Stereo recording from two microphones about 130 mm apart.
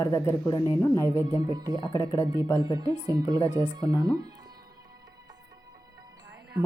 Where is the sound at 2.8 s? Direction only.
35° right (ahead or behind).